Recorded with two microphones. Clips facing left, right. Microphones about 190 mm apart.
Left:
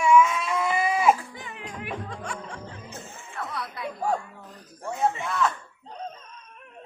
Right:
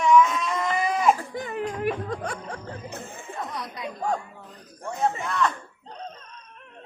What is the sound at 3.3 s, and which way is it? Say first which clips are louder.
Music: even; 20° right (ahead or behind).